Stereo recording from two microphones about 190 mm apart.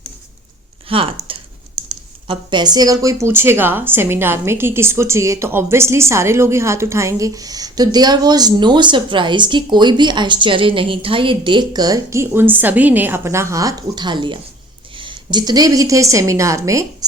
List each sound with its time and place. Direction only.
0.9 s speech: 30° right (ahead or behind)
2.2 s a woman's voice: 25° right (ahead or behind)